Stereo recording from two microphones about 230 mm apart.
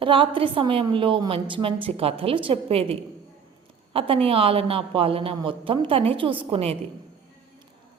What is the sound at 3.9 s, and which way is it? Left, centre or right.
A woman's voice, right.